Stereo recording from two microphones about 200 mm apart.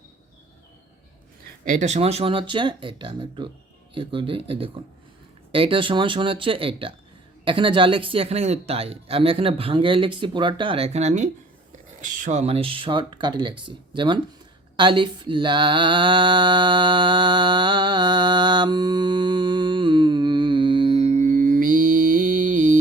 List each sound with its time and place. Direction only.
1.6 s speech: 40° right (ahead or behind)
14.8 s mantra: 25° right (ahead or behind); by 22.8 s 40° right (ahead or behind)